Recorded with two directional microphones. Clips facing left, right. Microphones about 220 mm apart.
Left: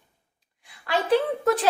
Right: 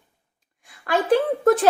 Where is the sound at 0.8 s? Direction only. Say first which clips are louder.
Right 3 dB; 50° right (ahead or behind).